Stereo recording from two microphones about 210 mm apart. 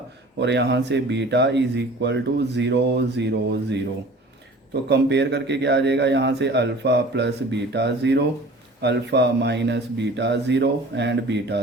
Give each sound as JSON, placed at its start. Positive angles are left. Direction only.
{"t": 0.3, "sound": "a man's voice", "side_deg": -55}